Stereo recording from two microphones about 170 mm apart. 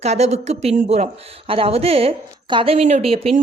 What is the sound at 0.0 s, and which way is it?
A woman's voice, 40° right (ahead or behind).